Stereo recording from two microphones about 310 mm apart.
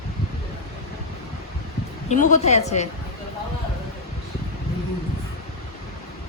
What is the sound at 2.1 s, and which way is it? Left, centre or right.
Speech, left.